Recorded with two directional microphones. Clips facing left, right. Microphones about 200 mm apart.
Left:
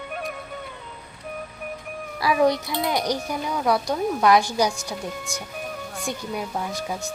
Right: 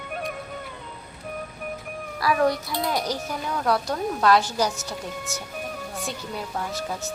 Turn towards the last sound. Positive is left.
turn(degrees=15)  # may be behind; listen again after turning